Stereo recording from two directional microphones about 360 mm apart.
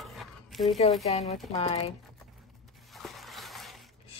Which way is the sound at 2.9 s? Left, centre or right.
Centre.